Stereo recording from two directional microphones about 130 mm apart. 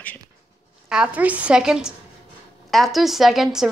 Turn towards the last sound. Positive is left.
turn(degrees=0)  # may be behind; listen again after turning